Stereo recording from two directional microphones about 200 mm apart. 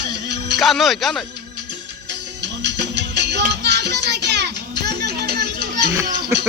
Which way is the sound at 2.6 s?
60° right (ahead or behind).